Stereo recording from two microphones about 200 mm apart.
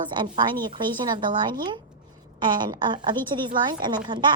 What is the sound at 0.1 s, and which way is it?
A woman's voice, 20° right (ahead or behind).